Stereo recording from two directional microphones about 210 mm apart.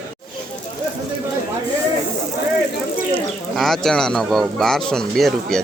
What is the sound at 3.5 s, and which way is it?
Speech, centre (ahead or behind).